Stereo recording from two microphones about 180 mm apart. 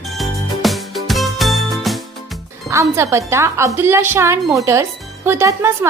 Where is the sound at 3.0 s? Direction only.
15° right (ahead or behind).